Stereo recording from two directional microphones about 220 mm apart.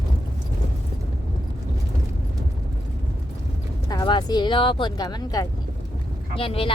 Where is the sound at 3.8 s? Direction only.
20° left (ahead or behind).